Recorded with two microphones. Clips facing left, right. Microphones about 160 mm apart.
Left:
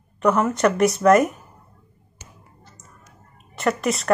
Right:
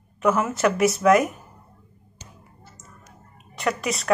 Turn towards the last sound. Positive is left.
turn(degrees=0)  # may be behind; listen again after turning